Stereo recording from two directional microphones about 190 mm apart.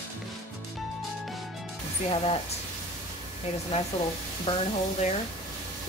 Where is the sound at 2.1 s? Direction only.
30° left (ahead or behind).